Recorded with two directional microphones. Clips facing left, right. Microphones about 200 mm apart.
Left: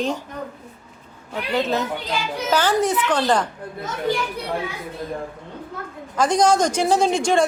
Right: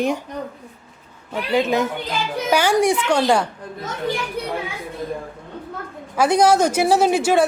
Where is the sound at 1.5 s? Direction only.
15° right (ahead or behind).